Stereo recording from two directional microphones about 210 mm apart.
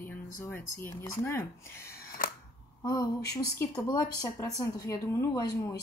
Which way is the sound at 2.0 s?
45° left (ahead or behind).